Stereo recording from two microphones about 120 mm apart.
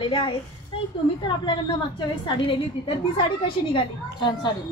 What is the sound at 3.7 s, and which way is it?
Speech, 40° left (ahead or behind).